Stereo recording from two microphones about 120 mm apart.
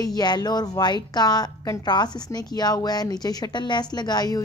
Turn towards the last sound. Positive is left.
turn(degrees=35)  # may be behind; listen again after turning